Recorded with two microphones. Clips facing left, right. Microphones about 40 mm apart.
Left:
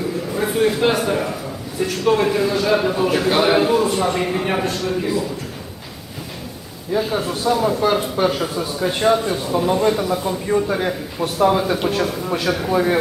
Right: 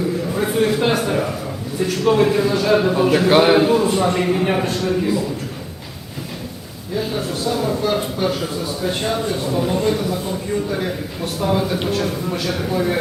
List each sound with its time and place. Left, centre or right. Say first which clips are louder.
0.3 s a man's voice: left 1 dB; centre
3.5 s a man's voice: right 1 dB; centre
7.0 s speech: right 1 dB; centre
10.0 s a man's voice: left 2 dB; centre